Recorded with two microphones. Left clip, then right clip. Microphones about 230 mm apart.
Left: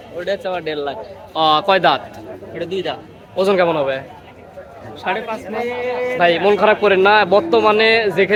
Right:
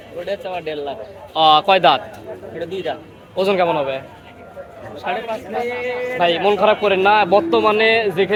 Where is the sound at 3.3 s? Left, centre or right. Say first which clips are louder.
Left 2 dB; centre.